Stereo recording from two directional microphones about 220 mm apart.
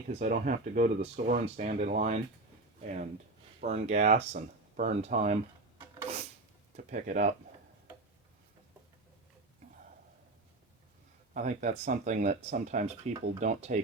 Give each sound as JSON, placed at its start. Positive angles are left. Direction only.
{"t": 0.1, "sound": "speech", "side_deg": -35}
{"t": 5.8, "sound": "a sound", "side_deg": -10}
{"t": 6.7, "sound": "speech", "side_deg": -35}
{"t": 11.3, "sound": "speech", "side_deg": -35}